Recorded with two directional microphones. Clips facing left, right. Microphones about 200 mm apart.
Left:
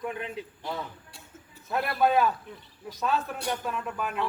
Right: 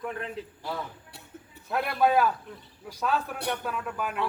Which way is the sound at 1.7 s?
Centre (ahead or behind).